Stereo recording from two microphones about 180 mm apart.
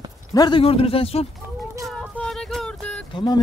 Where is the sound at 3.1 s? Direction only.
25° left (ahead or behind).